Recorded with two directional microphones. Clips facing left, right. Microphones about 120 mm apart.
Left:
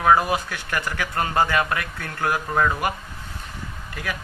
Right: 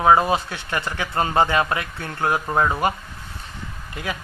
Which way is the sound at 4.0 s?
25° right (ahead or behind).